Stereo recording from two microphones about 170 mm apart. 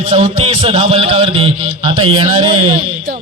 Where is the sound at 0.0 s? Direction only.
40° right (ahead or behind).